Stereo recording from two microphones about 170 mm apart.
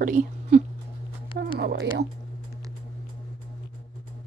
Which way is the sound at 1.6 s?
85° right.